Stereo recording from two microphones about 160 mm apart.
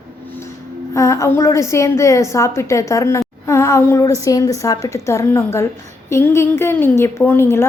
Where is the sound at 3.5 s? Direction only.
20° left (ahead or behind).